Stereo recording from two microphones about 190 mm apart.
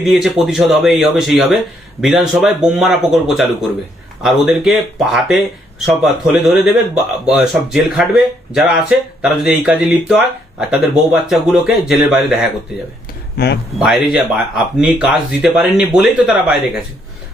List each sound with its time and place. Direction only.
0.0 s speech: centre (ahead or behind)
13.3 s speech: 55° left (ahead or behind)
13.7 s speech: centre (ahead or behind)